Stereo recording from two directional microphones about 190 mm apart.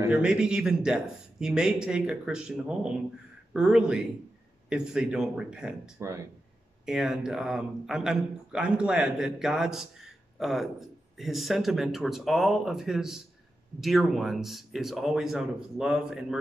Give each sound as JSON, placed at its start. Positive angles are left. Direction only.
{"t": 0.2, "sound": "a man's voice", "side_deg": -5}
{"t": 5.9, "sound": "speech", "side_deg": -15}
{"t": 6.9, "sound": "a man's voice", "side_deg": 0}